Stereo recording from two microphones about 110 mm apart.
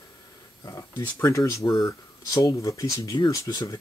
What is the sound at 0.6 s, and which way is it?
Speech, 25° left (ahead or behind).